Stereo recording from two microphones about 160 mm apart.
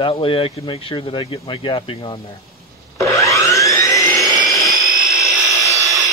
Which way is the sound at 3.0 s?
20° left (ahead or behind).